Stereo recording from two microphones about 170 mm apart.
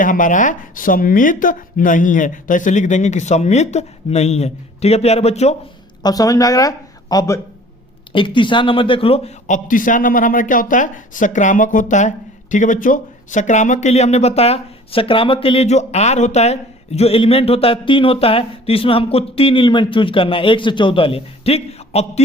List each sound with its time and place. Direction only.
0.0 s speech: 50° left (ahead or behind)
6.0 s a man's voice: 20° left (ahead or behind); by 22.2 s 40° left (ahead or behind)